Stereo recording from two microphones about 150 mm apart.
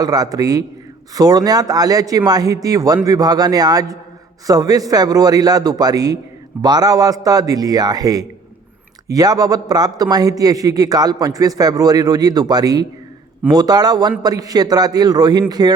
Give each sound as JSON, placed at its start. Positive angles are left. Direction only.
{"t": 0.0, "sound": "a man's voice", "side_deg": -25}